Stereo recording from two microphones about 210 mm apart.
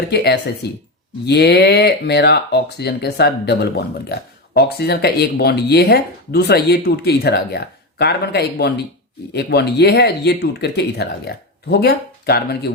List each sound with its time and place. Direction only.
0.1 s speech: 50° left (ahead or behind)